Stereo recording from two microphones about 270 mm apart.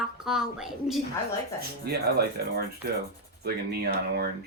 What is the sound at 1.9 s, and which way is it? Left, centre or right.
Speech, right.